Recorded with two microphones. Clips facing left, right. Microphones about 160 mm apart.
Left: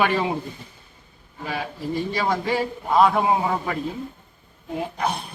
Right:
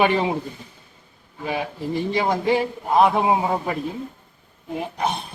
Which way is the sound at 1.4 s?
15° right (ahead or behind).